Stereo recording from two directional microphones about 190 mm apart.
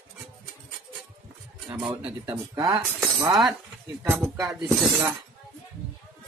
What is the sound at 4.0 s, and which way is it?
Speech, 10° right (ahead or behind).